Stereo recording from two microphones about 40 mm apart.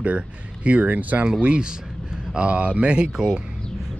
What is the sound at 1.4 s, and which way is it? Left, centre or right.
Speech, right.